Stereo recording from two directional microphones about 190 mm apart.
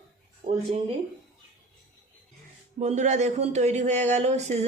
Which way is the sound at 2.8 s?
40° right (ahead or behind).